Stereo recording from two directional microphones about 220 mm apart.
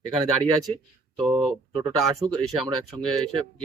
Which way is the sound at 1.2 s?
Centre (ahead or behind).